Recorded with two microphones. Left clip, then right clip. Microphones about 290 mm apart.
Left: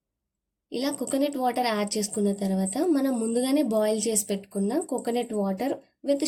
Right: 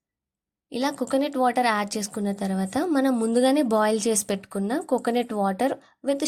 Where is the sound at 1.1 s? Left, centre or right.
Right.